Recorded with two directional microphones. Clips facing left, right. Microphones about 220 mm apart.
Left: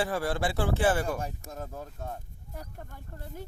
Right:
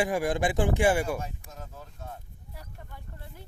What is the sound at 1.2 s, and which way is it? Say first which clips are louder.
Speech: left 3 dB; 40° left (ahead or behind).